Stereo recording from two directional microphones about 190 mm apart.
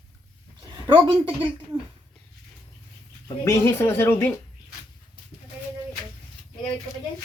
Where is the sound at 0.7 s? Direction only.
25° right (ahead or behind).